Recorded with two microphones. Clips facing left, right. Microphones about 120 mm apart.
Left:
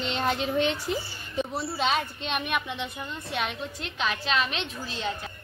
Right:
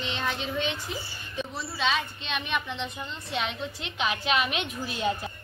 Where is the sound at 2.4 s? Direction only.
10° left (ahead or behind); by 4.6 s 10° right (ahead or behind).